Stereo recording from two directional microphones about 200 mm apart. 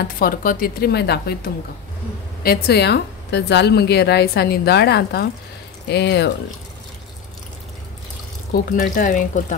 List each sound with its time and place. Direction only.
0.0 s a woman's voice: 45° left (ahead or behind)
8.9 s speech: 40° left (ahead or behind)